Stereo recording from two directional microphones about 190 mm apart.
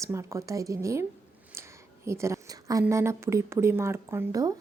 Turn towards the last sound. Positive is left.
turn(degrees=-20)  # may be behind; listen again after turning